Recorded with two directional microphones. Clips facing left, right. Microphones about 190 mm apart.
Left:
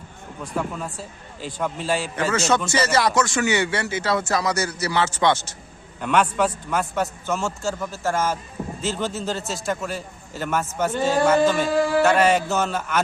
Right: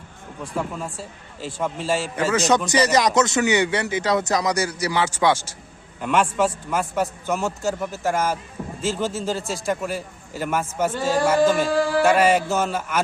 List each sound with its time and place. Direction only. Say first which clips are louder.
1.6 s a man's voice: right 1 dB; centre (ahead or behind)
2.1 s a man's voice: right 3 dB; 15° right (ahead or behind)